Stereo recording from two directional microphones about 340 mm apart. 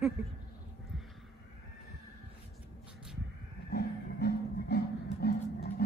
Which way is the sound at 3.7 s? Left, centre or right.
Left.